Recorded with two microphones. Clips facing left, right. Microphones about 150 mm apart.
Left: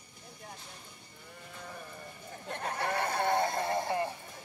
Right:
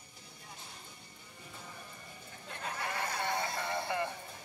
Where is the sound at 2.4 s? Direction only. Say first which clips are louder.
Left 5 dB; 55° left (ahead or behind).